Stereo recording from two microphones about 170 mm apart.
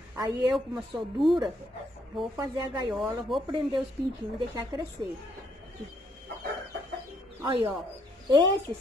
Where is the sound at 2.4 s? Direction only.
25° right (ahead or behind).